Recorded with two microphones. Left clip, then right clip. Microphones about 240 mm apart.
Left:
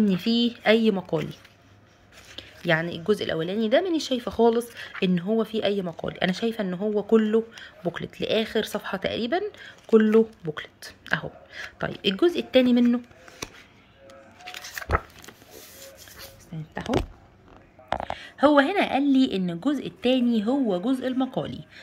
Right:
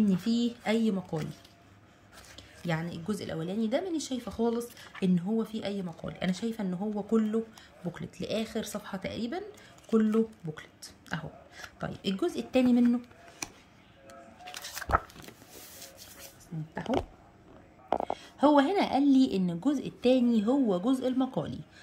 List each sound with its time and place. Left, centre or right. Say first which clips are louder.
0.1 s a woman's voice: left 6 dB; centre
2.3 s a woman's voice: left 11 dB; centre
14.6 s a sound: left 2 dB; right
18.2 s a woman's voice: left 5 dB; centre